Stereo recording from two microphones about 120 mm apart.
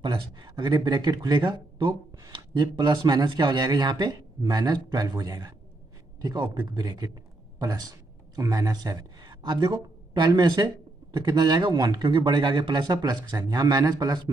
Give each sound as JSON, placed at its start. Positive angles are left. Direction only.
{"t": 0.0, "sound": "a man's voice", "side_deg": -40}